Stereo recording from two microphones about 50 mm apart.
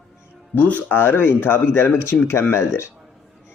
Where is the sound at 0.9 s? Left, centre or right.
Left.